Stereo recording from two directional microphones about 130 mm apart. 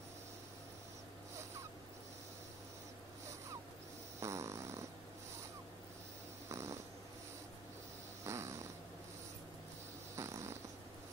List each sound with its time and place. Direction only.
4.2 s fart: 20° right (ahead or behind)
6.5 s snoring: 25° right (ahead or behind)
8.2 s snoring: 20° right (ahead or behind)
10.1 s snoring: 20° right (ahead or behind)